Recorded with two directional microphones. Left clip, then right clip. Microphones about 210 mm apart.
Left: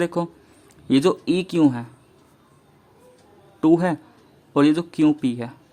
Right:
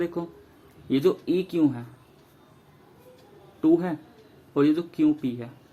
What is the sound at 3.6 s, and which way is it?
A man's voice, 50° left (ahead or behind).